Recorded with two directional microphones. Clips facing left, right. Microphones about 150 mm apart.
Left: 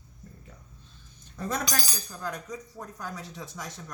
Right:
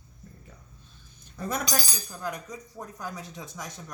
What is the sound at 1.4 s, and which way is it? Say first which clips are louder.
Speech: right 1 dB; 10° right (ahead or behind).